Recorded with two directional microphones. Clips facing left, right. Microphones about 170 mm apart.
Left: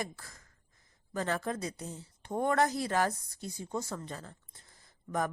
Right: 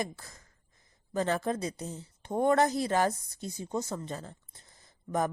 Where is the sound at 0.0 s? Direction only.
20° right (ahead or behind).